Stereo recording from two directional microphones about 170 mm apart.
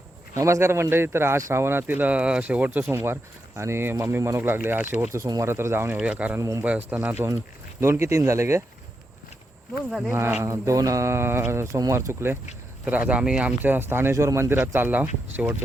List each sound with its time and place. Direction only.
0.3 s speech: 15° right (ahead or behind)
9.9 s speech: 10° right (ahead or behind)